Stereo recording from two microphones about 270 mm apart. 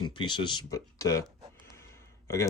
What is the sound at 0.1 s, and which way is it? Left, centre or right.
Speech, centre.